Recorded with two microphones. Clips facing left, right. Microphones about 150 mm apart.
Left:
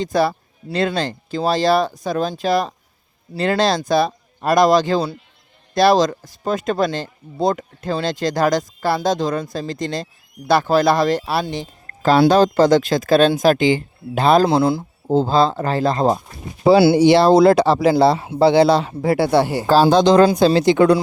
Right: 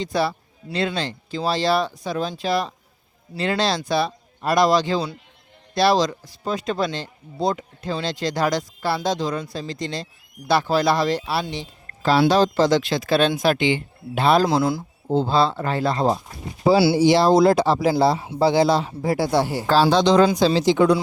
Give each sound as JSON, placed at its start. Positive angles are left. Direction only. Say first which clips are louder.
{"t": 0.0, "sound": "speech", "louder": "left 5 dB", "side_deg": 45}
{"t": 14.4, "sound": "speech", "louder": "left 4 dB", "side_deg": 30}
{"t": 15.0, "sound": "speech", "louder": "left 3 dB", "side_deg": 45}
{"t": 16.6, "sound": "speech", "louder": "left 4 dB", "side_deg": 60}
{"t": 19.6, "sound": "speech", "louder": "left 4 dB", "side_deg": 45}